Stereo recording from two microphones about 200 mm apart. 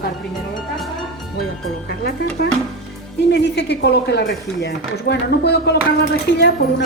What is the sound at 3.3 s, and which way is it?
Speech, 60° left (ahead or behind).